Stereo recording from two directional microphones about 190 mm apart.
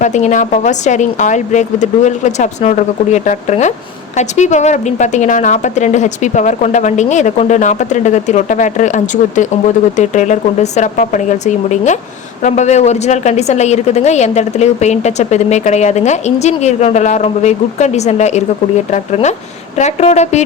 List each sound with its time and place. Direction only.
0.0 s a woman's voice: 40° left (ahead or behind)